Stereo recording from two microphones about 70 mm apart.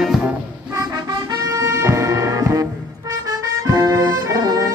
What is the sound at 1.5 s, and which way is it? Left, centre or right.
Music, right.